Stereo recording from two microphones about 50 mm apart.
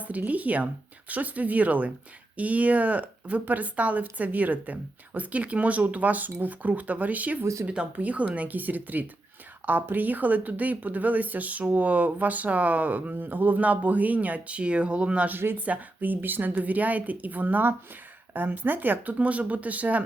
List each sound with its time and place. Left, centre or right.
0.0 s speech: right
15.3 s speech: right
15.5 s speech: right